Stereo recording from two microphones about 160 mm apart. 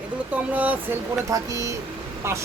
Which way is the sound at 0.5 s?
10° right (ahead or behind).